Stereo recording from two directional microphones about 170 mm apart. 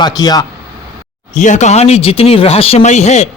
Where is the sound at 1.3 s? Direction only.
45° left (ahead or behind).